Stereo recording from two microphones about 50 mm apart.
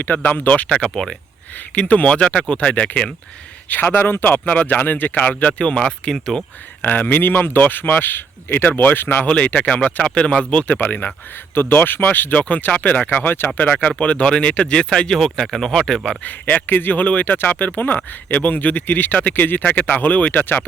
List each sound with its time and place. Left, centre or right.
0.0 s speech: left
3.7 s speech: left
4.4 s speech: left
5.2 s speech: left
5.8 s speech: centre
6.8 s speech: left
9.3 s speech: left
14.0 s speech: left
16.2 s speech: left